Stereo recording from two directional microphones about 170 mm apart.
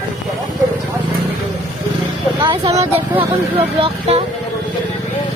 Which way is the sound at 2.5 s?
35° right (ahead or behind).